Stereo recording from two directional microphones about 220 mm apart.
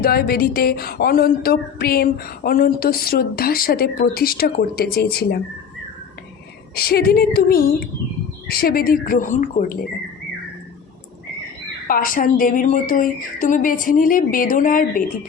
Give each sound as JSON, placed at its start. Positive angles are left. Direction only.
{"t": 0.0, "sound": "speech", "side_deg": 45}
{"t": 6.7, "sound": "a woman's voice", "side_deg": 45}
{"t": 11.9, "sound": "a woman's voice", "side_deg": 40}